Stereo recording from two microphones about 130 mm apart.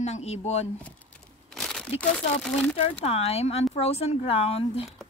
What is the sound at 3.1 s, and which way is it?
Speech, 50° left (ahead or behind).